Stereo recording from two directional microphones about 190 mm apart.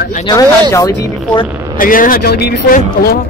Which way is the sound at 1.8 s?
45° left (ahead or behind).